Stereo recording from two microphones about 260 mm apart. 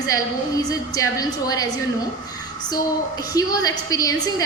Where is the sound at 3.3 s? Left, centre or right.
Centre.